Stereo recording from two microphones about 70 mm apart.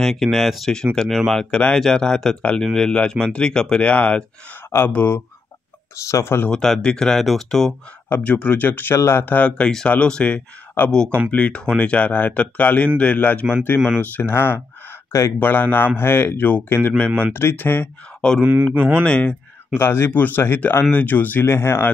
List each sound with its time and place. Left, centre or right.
0.0 s speech: centre
4.6 s speech: left
6.5 s speech: centre
8.2 s speech: centre
8.9 s speech: left
9.2 s speech: left
9.5 s speech: centre; by 17.8 s left
18.4 s speech: right
19.0 s speech: centre
19.8 s speech: left